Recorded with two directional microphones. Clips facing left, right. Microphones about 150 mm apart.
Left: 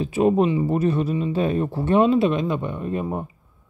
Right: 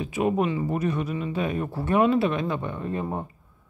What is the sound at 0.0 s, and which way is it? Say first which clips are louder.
Speech: left 5 dB; 30° left (ahead or behind).